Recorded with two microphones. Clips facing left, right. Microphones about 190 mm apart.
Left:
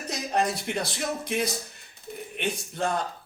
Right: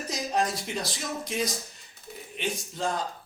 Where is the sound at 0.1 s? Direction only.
60° left (ahead or behind).